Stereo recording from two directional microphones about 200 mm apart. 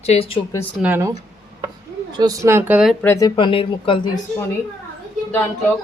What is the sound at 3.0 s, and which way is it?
A woman's voice, 15° left (ahead or behind).